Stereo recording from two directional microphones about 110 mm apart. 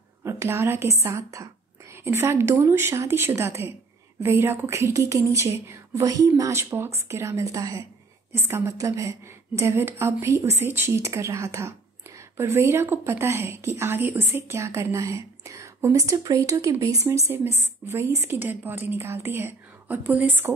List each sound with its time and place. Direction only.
0.2 s a woman's voice: 25° right (ahead or behind)